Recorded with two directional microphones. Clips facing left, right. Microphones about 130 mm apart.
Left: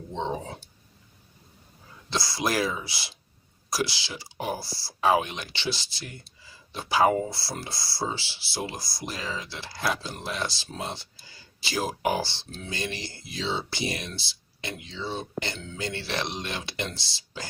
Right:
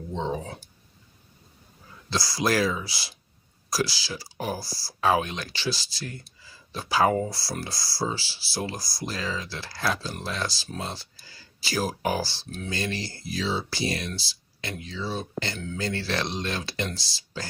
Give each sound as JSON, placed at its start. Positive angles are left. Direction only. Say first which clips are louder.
{"t": 0.1, "sound": "speech", "louder": "right 1 dB", "side_deg": 25}
{"t": 2.0, "sound": "speech", "louder": "right 2 dB", "side_deg": 25}